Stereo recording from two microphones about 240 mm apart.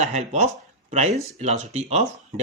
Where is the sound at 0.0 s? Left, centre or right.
Right.